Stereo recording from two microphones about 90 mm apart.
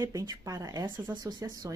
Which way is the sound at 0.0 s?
40° right (ahead or behind).